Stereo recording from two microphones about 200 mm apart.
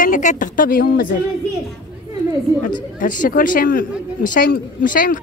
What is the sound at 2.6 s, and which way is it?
Speech, 40° left (ahead or behind).